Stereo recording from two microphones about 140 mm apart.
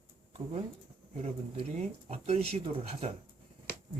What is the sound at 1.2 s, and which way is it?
Speech, 50° right (ahead or behind).